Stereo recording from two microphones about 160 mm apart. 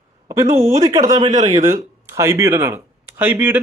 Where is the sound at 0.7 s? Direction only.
20° right (ahead or behind).